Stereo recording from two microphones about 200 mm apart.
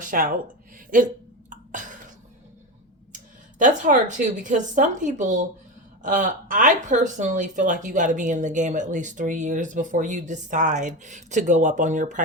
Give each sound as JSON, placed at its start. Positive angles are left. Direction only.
{"t": 0.0, "sound": "speech", "side_deg": -45}
{"t": 0.9, "sound": "hiccup", "side_deg": -40}
{"t": 3.6, "sound": "speech", "side_deg": -40}